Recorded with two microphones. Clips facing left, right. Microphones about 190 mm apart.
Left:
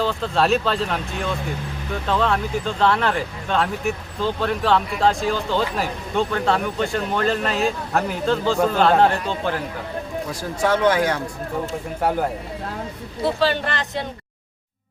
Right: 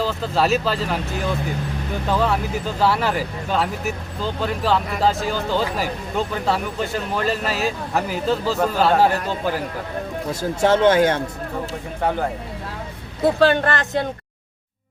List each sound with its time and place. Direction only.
0.0 s speech: 5° right (ahead or behind)
10.6 s speech: 25° right (ahead or behind)
13.2 s speech: 50° right (ahead or behind)